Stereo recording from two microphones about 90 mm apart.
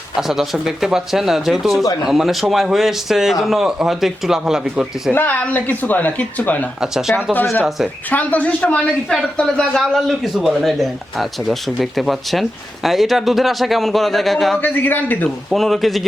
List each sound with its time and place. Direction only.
0.2 s speech: 5° right (ahead or behind)
5.1 s speech: 20° left (ahead or behind)
6.8 s speech: 5° right (ahead or behind)
8.1 s speech: 15° left (ahead or behind); by 14.6 s centre (ahead or behind)
14.6 s speech: 20° left (ahead or behind)
15.4 s speech: 5° left (ahead or behind)